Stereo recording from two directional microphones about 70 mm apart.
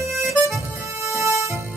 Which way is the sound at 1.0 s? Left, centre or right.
Right.